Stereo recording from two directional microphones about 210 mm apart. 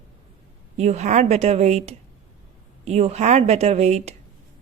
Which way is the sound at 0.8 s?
35° right (ahead or behind).